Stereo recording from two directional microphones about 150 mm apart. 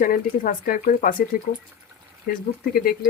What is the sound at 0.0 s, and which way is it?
Speech, 75° left (ahead or behind).